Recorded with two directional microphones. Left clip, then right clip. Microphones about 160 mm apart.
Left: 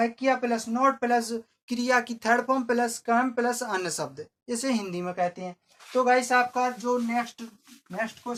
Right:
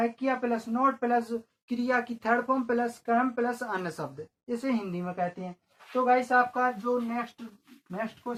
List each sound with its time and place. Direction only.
0.0 s speech: 20° left (ahead or behind)
5.9 s speech: 30° left (ahead or behind)
7.9 s speech: 15° left (ahead or behind)